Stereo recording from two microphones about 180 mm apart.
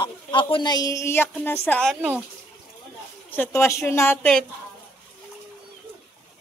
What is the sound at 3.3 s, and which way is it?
A woman's voice, 15° left (ahead or behind).